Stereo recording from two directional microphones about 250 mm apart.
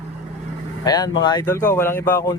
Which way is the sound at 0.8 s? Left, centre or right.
Centre.